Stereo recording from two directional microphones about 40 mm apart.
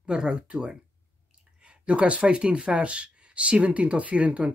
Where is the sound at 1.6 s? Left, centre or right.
Right.